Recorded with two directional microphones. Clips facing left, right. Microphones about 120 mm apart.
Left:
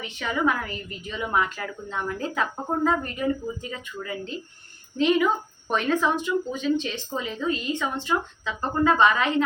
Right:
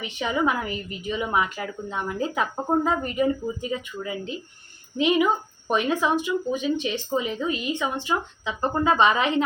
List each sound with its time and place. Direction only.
0.0 s a woman's voice: 15° right (ahead or behind)